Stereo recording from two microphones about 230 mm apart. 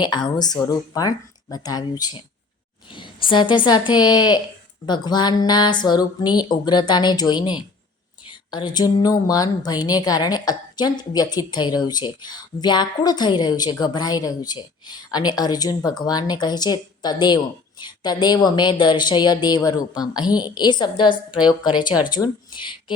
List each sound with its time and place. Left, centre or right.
0.0 s a woman's voice: centre